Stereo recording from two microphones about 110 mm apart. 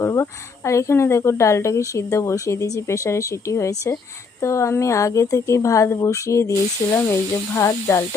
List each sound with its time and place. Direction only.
0.0 s speech: 25° left (ahead or behind)